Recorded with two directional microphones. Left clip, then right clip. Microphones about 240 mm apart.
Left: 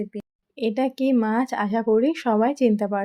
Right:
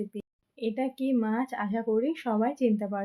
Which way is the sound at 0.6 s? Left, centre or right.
Left.